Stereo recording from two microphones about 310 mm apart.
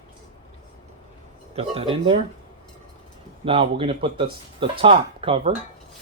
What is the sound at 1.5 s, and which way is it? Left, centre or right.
Speech, centre.